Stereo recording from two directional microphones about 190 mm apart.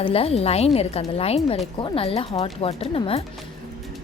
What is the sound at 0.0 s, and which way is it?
A woman's voice, 30° left (ahead or behind).